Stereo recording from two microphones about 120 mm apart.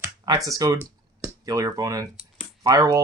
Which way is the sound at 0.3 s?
30° right (ahead or behind).